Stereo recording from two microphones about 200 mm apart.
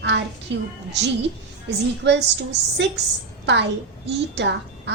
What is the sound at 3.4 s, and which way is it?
Speech, 60° right (ahead or behind).